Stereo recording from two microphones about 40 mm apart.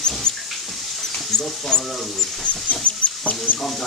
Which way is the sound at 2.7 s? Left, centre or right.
Left.